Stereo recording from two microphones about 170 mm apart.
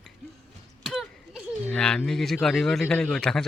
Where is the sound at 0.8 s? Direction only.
Centre (ahead or behind).